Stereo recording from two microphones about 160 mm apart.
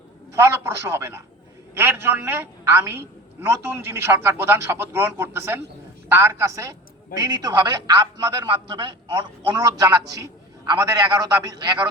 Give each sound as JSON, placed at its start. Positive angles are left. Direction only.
{"t": 0.3, "sound": "a man's voice", "side_deg": -15}